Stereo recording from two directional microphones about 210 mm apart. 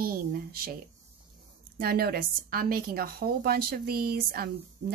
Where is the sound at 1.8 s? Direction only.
45° right (ahead or behind).